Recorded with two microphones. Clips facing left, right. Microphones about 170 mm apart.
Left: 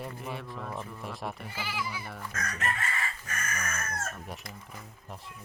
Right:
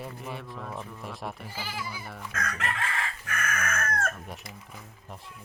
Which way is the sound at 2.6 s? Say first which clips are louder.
Left 1 dB; 65° right (ahead or behind).